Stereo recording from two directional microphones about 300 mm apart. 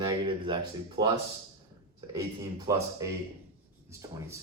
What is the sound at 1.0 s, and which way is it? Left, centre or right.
Speech, right.